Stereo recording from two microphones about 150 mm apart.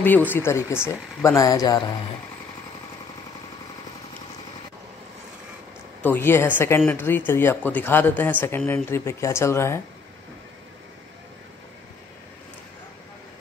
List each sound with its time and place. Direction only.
0.0 s speech: 10° left (ahead or behind)
6.0 s speech: 15° left (ahead or behind)